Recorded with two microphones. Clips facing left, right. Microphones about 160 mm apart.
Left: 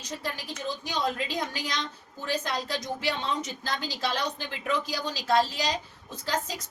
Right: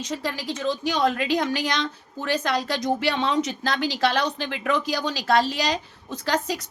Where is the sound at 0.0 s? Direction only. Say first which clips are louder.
Right 7 dB; 90° right.